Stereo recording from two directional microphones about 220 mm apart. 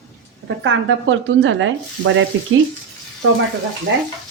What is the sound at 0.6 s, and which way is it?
Speech, 60° right (ahead or behind).